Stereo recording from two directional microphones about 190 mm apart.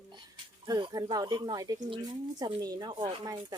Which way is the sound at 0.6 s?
25° right (ahead or behind).